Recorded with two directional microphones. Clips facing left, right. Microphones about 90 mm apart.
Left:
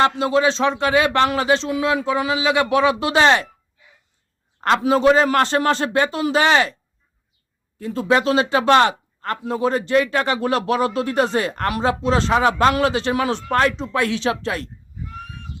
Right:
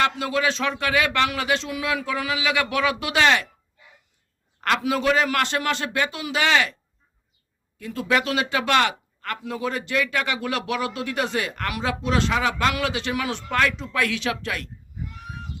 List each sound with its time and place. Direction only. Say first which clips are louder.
0.0 s speech: left 6 dB; 30° left (ahead or behind)
4.6 s speech: left 6 dB; 30° left (ahead or behind)
7.8 s speech: left 5 dB; 30° left (ahead or behind)